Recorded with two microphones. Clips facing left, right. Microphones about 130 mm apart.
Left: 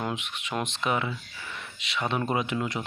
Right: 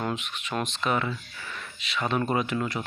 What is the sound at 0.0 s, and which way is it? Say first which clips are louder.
Speech: right 1 dB; 15° left (ahead or behind).